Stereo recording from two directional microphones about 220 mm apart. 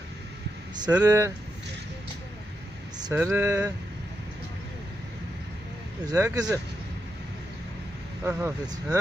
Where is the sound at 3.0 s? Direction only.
10° right (ahead or behind).